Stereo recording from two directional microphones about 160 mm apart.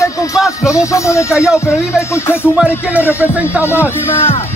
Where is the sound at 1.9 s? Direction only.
15° left (ahead or behind).